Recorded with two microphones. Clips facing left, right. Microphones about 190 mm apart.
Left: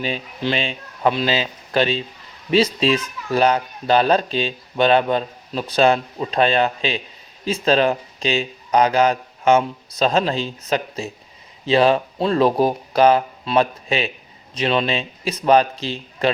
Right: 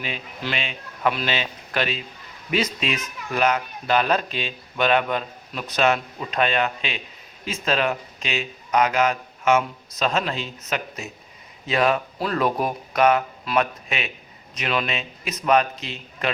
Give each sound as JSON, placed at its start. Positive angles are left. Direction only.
{"t": 0.0, "sound": "speech", "side_deg": 30}